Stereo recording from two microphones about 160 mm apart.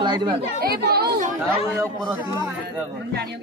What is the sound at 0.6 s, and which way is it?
Speech, 80° right.